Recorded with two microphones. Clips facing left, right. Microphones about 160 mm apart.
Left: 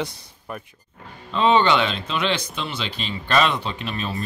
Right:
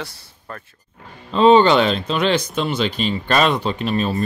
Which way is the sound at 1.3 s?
35° right (ahead or behind).